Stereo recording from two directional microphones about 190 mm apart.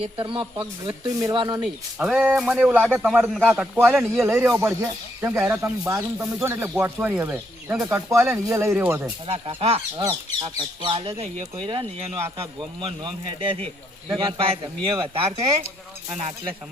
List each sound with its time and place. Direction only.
0.0 s speech: 25° right (ahead or behind)
1.6 s a man's voice: 5° right (ahead or behind)
9.6 s speech: 30° right (ahead or behind)